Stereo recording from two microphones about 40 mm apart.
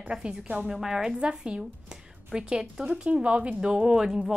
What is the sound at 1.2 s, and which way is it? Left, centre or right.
A woman's voice, right.